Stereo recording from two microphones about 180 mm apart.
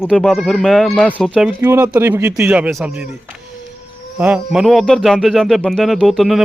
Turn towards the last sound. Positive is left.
turn(degrees=0)  # may be behind; listen again after turning